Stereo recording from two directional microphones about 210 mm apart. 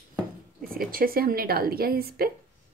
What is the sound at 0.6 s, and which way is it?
A woman's voice, 45° right (ahead or behind).